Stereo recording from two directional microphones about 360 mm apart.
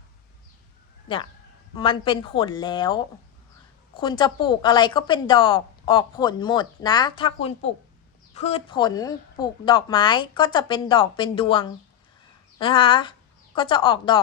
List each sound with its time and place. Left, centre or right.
1.0 s a woman's voice: centre